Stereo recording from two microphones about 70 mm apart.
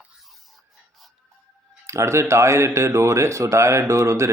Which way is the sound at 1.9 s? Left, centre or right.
Right.